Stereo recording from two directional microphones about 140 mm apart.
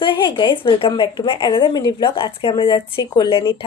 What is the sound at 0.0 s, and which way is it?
A woman's voice, 35° left (ahead or behind).